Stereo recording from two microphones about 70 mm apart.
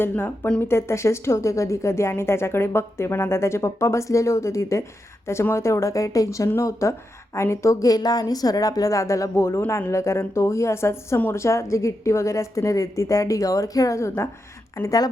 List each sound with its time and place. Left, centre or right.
0.6 s a woman's voice: left
14.8 s a woman's voice: left